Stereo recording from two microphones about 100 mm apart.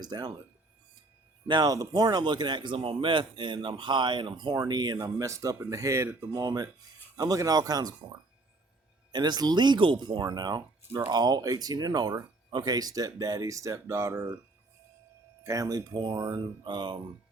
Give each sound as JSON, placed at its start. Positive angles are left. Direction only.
{"t": 0.0, "sound": "speech", "side_deg": -45}
{"t": 1.5, "sound": "speech", "side_deg": -45}
{"t": 5.1, "sound": "speech", "side_deg": -30}
{"t": 6.3, "sound": "speech", "side_deg": -40}
{"t": 15.4, "sound": "speech", "side_deg": -35}